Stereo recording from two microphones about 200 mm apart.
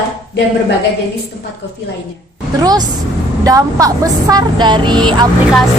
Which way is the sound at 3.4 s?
15° right (ahead or behind).